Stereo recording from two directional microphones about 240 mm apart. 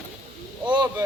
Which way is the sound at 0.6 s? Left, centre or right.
Centre.